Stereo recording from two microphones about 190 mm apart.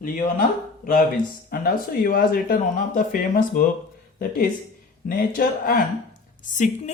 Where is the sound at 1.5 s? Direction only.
50° left (ahead or behind).